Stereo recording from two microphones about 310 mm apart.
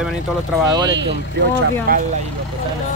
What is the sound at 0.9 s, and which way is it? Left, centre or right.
Speech, right.